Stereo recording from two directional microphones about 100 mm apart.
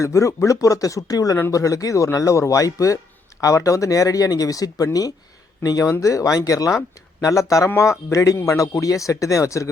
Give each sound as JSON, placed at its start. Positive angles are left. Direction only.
{"t": 0.0, "sound": "speech", "side_deg": 30}